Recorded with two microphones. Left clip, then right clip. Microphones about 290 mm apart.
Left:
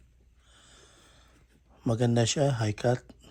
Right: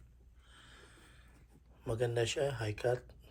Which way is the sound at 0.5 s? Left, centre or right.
Centre.